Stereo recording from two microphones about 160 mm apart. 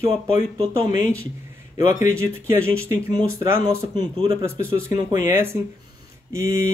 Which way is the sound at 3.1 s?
25° right (ahead or behind).